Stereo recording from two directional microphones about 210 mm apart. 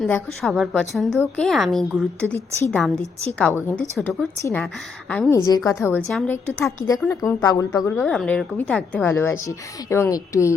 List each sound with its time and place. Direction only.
0.0 s a woman's voice: centre (ahead or behind)